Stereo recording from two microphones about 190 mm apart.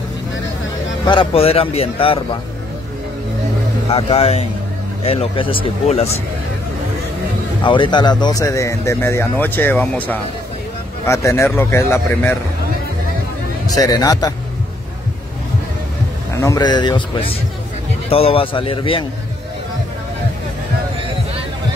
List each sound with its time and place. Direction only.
1.0 s a man's voice: 30° left (ahead or behind)
3.9 s a man's voice: 30° left (ahead or behind)
7.6 s speech: 25° left (ahead or behind)
13.7 s a man's voice: 20° left (ahead or behind)
16.3 s a man's voice: 20° left (ahead or behind)